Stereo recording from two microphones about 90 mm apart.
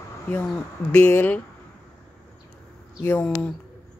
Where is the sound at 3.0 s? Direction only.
15° left (ahead or behind).